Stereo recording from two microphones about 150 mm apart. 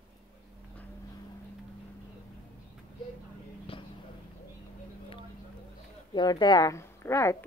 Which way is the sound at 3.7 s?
40° left (ahead or behind).